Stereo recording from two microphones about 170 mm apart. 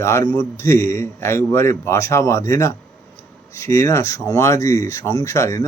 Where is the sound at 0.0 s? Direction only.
15° left (ahead or behind).